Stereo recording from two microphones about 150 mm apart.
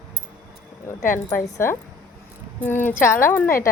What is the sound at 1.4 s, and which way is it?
Speech, 20° left (ahead or behind).